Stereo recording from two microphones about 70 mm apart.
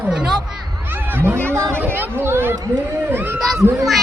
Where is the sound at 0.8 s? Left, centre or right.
Right.